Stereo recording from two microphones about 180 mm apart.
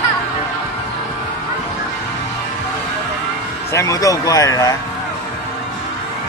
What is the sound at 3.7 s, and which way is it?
Speech, 15° left (ahead or behind).